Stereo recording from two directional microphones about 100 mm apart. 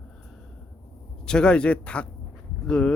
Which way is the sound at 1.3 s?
10° left (ahead or behind).